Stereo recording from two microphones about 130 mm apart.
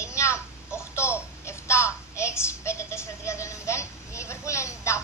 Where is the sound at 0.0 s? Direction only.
20° left (ahead or behind).